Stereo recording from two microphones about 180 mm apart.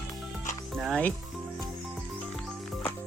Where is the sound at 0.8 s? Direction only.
Centre (ahead or behind).